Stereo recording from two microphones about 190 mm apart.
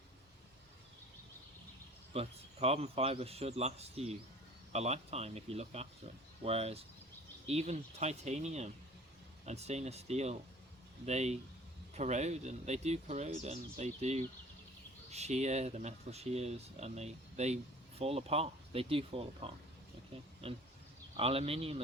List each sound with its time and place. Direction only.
2.1 s speech: 35° right (ahead or behind)